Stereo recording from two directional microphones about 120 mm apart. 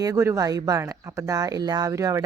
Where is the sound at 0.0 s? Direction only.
25° right (ahead or behind).